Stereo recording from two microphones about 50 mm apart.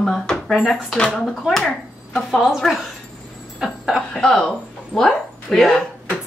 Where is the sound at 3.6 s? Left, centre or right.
Centre.